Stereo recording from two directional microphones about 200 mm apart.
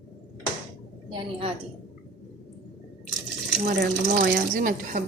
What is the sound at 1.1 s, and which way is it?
Speech, 25° right (ahead or behind).